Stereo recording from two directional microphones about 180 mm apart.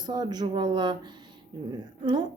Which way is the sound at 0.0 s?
25° right (ahead or behind).